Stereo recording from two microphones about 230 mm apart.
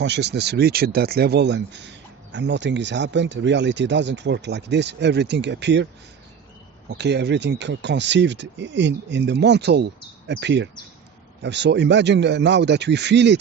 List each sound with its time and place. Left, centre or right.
0.0 s speech: right
6.9 s speech: right